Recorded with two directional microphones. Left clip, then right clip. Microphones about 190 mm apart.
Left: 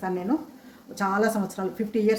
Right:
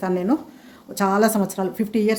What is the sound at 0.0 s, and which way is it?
A woman's voice, 60° right (ahead or behind).